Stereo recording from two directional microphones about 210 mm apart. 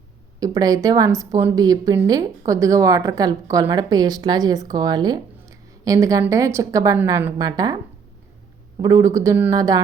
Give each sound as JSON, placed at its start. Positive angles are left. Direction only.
{"t": 0.3, "sound": "speech", "side_deg": -15}
{"t": 8.8, "sound": "speech", "side_deg": -15}